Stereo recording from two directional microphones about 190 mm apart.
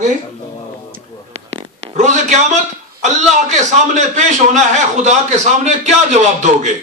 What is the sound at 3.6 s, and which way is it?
Speech, 40° right (ahead or behind).